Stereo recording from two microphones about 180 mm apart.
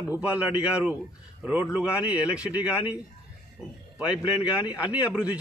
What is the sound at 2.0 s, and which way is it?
Speech, 5° right (ahead or behind).